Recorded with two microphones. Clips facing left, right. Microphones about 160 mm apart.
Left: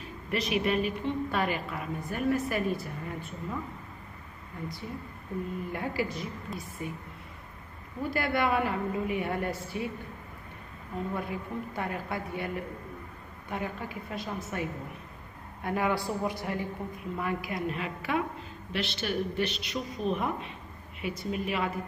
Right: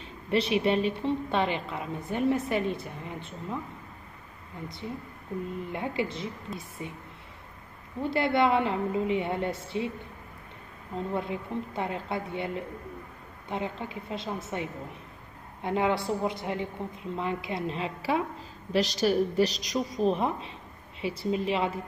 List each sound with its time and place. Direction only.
0.0 s a woman's voice: 30° right (ahead or behind)
5.7 s a woman's voice: 20° right (ahead or behind)
8.0 s a woman's voice: 25° right (ahead or behind)
11.0 s a woman's voice: 25° right (ahead or behind)
18.7 s a woman's voice: 40° right (ahead or behind)